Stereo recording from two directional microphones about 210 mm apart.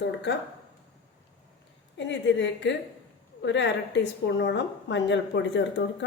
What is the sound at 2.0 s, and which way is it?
A woman's voice, 60° left (ahead or behind).